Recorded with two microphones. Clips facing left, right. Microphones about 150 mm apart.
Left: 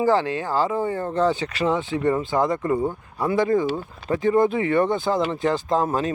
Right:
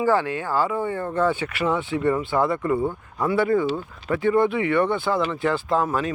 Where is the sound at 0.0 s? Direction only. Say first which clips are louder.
Left 1 dB; 35° left (ahead or behind).